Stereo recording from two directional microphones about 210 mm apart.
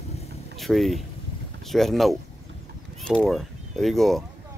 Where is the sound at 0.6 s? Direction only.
Centre (ahead or behind).